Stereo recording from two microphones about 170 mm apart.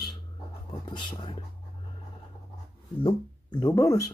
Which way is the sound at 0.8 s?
25° left (ahead or behind).